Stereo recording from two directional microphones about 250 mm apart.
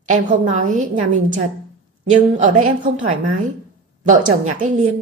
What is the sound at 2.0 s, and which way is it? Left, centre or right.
A woman's voice, right.